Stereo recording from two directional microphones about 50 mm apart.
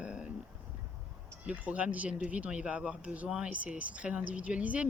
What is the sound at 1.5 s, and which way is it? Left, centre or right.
Speech, right.